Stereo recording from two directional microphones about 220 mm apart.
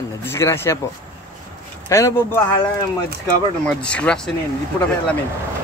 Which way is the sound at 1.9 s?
15° left (ahead or behind).